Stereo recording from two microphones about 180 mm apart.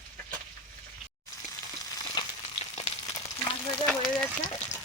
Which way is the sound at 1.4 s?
20° left (ahead or behind).